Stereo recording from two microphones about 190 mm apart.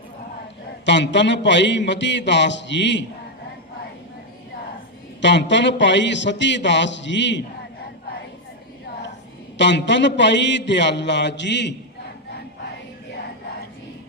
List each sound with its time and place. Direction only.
0.9 s speech: 70° left (ahead or behind)
5.2 s speech: 70° left (ahead or behind)
9.6 s speech: 70° left (ahead or behind)